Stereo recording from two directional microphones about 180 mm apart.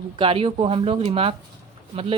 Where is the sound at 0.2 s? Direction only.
30° right (ahead or behind).